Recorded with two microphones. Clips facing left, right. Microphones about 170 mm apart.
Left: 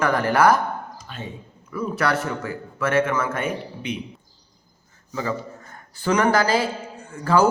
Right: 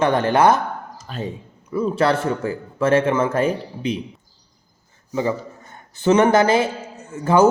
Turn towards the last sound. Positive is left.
turn(degrees=-20)  # may be behind; listen again after turning